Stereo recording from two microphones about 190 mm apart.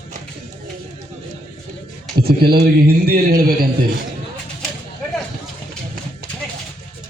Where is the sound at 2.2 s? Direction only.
55° right (ahead or behind).